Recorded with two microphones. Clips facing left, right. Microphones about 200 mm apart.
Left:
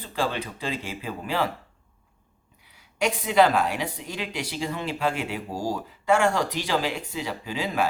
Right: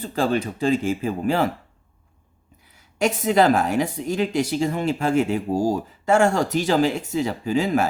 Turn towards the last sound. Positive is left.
turn(degrees=-45)  # may be behind; listen again after turning